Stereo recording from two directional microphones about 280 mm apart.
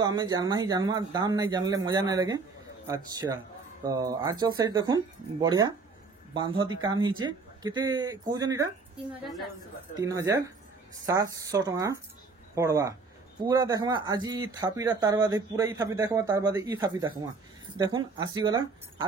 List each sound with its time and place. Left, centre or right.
0.0 s speech: centre
9.2 s a woman's voice: centre
9.9 s speech: centre